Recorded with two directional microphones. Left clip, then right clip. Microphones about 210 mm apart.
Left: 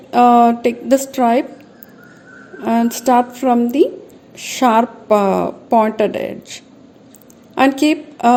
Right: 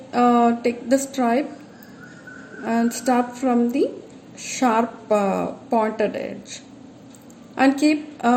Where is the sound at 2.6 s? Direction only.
45° left (ahead or behind).